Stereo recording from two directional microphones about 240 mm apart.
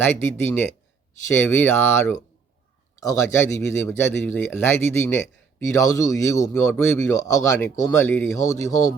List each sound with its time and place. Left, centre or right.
0.0 s a man's voice: centre